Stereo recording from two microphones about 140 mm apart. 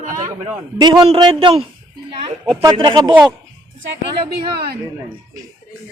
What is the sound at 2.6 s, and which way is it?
Speech, 30° right (ahead or behind).